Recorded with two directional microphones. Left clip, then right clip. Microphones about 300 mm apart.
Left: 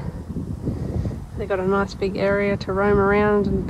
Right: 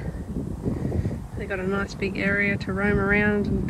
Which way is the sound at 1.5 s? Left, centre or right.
Centre.